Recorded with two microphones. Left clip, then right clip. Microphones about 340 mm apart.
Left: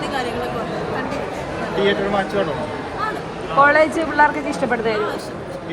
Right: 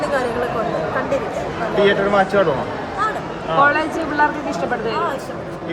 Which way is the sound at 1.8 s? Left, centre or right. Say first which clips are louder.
Right 4 dB; right.